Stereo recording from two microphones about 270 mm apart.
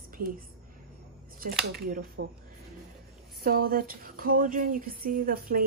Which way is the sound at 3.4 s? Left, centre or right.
Right.